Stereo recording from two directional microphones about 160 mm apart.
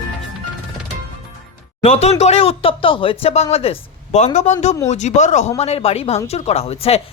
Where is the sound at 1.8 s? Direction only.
40° left (ahead or behind).